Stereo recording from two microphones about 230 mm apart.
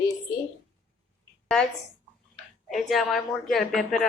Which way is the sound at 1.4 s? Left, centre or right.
Centre.